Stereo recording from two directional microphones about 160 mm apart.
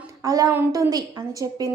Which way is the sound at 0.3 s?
20° right (ahead or behind).